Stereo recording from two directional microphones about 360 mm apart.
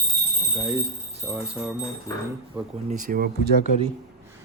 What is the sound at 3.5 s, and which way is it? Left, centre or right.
Speech, left.